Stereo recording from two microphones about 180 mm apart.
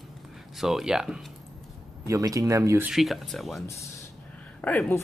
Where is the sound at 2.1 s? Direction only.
20° right (ahead or behind).